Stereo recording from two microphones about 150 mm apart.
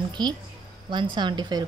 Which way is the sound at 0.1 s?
30° right (ahead or behind).